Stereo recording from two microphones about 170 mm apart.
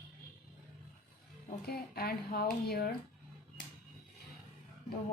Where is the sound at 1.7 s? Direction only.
65° left (ahead or behind).